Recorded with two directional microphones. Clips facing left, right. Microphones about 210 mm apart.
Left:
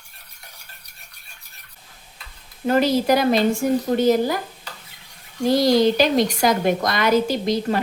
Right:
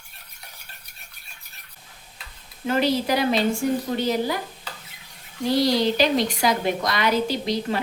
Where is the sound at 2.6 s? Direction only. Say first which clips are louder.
Left 4 dB; 45° left (ahead or behind).